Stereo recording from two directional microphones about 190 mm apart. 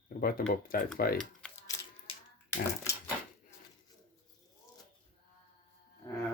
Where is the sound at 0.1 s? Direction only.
50° left (ahead or behind).